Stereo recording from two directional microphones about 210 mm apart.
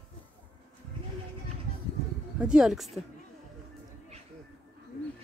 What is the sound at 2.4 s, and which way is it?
Speech, 5° right (ahead or behind).